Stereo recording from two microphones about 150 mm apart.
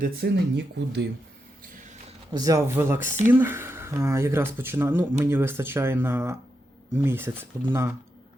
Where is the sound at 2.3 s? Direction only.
20° right (ahead or behind).